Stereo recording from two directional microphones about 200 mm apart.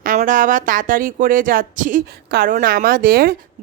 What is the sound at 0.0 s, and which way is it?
A woman's voice, 40° right (ahead or behind).